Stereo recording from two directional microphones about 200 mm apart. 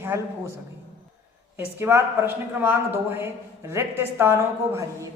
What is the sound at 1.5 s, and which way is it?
A woman's voice, 10° right (ahead or behind).